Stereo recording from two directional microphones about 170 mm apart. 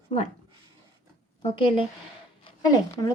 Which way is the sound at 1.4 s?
35° left (ahead or behind).